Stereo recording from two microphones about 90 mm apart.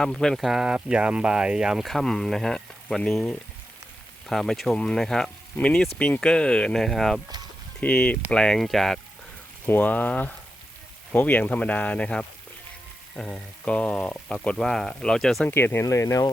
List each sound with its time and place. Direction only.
0.0 s speech: 5° left (ahead or behind)
7.8 s speech: 15° left (ahead or behind)
9.6 s speech: 20° left (ahead or behind); by 15.4 s 5° left (ahead or behind)
15.4 s speech: 25° left (ahead or behind)